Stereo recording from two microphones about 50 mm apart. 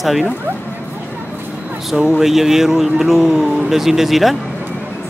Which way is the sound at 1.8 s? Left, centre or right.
Centre.